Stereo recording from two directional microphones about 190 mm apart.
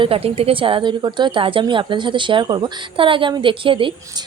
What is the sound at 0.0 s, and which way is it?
A woman's voice, 30° right (ahead or behind).